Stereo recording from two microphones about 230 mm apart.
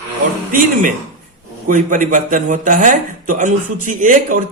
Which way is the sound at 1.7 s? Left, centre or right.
Right.